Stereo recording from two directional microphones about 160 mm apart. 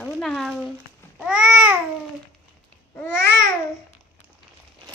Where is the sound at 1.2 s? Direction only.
5° right (ahead or behind).